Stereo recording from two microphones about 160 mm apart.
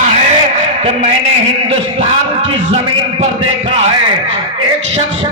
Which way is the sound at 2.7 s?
35° right (ahead or behind).